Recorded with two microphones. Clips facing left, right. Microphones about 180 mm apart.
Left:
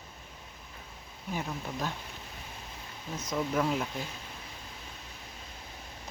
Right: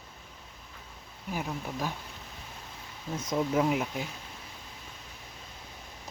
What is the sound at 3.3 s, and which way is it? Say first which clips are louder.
Speech: right 3 dB; 20° right (ahead or behind).